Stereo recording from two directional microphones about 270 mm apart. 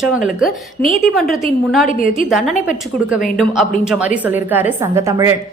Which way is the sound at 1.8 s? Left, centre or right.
Left.